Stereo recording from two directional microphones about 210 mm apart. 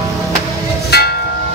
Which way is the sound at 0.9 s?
50° left (ahead or behind).